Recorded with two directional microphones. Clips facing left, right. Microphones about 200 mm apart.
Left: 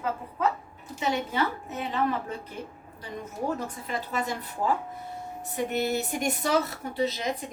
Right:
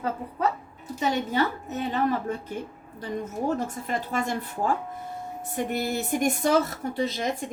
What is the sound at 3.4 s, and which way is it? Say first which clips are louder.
Speech: right 2 dB; 45° right (ahead or behind).